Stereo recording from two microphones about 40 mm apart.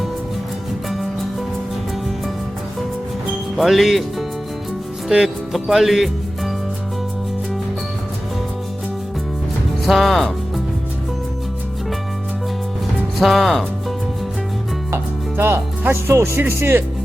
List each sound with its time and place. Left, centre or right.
3.5 s speech: centre
5.5 s music: centre
9.8 s speech: centre
13.1 s speech: centre
14.9 s music: right
15.9 s speech: right